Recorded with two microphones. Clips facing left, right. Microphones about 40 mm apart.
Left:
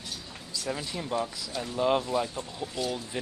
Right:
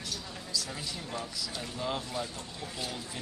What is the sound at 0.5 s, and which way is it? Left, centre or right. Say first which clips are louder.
Speech: left 5 dB; left.